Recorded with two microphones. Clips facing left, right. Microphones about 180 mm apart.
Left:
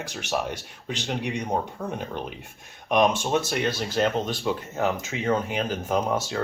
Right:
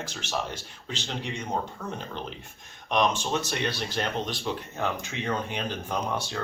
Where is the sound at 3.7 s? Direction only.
45° left (ahead or behind).